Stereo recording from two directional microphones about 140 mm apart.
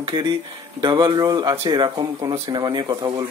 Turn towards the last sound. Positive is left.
turn(degrees=-30)  # may be behind; listen again after turning